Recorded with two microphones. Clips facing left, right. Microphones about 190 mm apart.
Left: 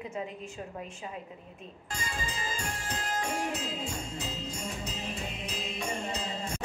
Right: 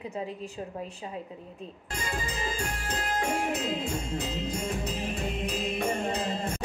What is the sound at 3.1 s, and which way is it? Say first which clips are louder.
Music: right 4 dB; 55° right (ahead or behind).